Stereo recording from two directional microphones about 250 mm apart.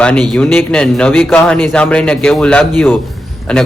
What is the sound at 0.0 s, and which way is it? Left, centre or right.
A man's voice, centre.